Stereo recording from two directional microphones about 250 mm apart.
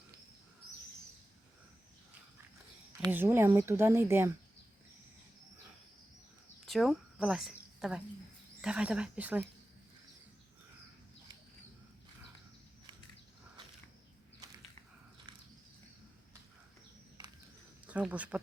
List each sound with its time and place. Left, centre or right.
3.0 s speech: centre
6.7 s speech: centre
17.8 s speech: centre